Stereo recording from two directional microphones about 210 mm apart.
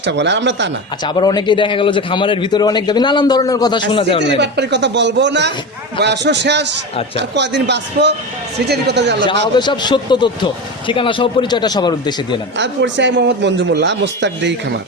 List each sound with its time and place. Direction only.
0.0 s a man's voice: 55° right (ahead or behind)
1.0 s a man's voice: 20° left (ahead or behind)
4.4 s a man's voice: 55° right (ahead or behind)
9.6 s a man's voice: 20° left (ahead or behind)
12.5 s a man's voice: 60° right (ahead or behind)